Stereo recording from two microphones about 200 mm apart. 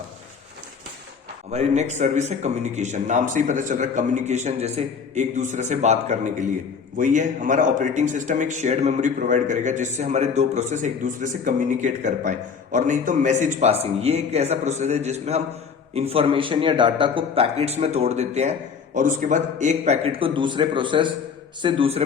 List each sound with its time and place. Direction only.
1.5 s a man's voice: 35° right (ahead or behind)